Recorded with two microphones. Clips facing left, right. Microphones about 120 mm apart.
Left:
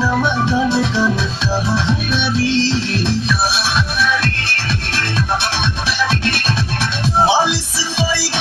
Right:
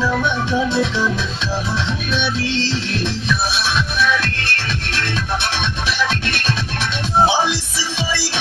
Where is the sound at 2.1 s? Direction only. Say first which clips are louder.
Left 3 dB; 35° left (ahead or behind).